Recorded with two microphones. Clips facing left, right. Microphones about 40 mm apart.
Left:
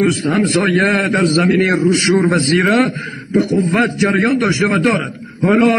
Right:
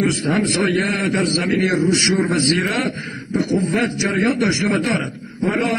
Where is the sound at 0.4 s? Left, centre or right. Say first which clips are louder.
Left 6 dB; left.